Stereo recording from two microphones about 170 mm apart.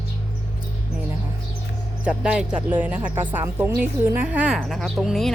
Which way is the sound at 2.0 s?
5° right (ahead or behind).